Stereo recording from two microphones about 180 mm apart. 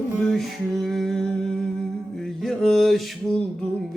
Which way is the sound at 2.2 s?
Centre (ahead or behind).